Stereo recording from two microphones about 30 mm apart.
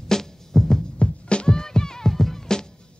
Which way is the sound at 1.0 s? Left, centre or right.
Left.